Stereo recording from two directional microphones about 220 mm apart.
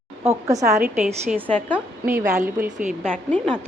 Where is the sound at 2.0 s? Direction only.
10° right (ahead or behind).